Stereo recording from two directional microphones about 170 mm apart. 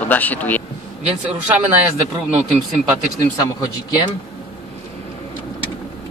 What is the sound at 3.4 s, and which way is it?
Speech, 25° left (ahead or behind).